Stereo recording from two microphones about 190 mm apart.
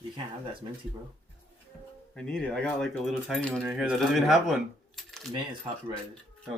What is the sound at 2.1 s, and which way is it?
Speech, 5° left (ahead or behind).